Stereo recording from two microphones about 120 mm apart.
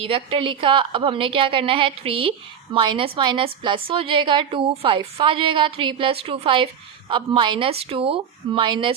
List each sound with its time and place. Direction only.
0.0 s a woman's voice: 50° right (ahead or behind)
7.7 s a woman's voice: 55° right (ahead or behind)